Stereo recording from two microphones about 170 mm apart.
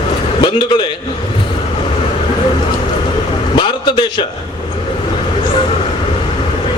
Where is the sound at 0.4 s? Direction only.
25° left (ahead or behind).